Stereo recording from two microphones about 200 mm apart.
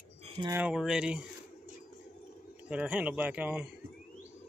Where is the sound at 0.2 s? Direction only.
30° right (ahead or behind).